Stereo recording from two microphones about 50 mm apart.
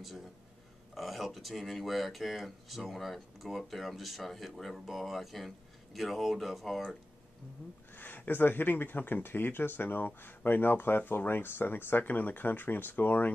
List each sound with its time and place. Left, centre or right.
0.9 s speech: centre
7.9 s speech: left